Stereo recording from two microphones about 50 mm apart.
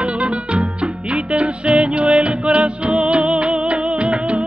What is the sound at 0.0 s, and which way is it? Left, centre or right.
Music, right.